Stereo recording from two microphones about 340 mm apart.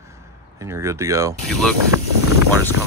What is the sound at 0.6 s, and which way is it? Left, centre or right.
Speech, centre.